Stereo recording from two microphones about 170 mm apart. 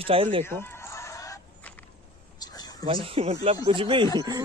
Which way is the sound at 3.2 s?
35° right (ahead or behind).